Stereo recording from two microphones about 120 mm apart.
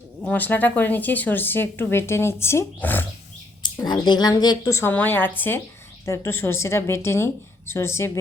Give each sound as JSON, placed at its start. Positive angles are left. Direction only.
{"t": 0.2, "sound": "speech", "side_deg": 15}
{"t": 3.6, "sound": "speech", "side_deg": 40}
{"t": 4.7, "sound": "a woman's voice", "side_deg": 20}